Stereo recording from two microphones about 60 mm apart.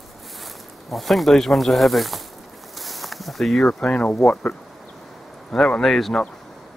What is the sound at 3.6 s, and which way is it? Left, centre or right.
Speech, centre.